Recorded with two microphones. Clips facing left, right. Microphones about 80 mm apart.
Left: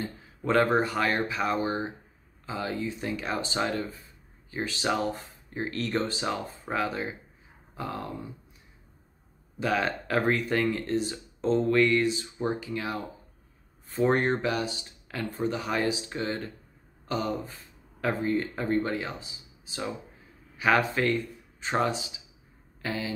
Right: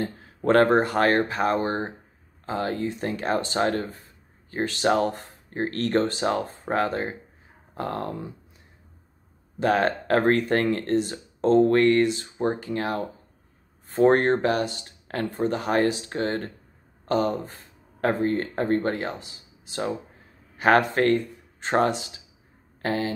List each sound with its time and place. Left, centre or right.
0.0 s a sound: right
0.7 s speech: right
9.6 s speech: right